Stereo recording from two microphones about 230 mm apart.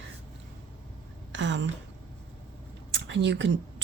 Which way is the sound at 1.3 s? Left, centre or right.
Right.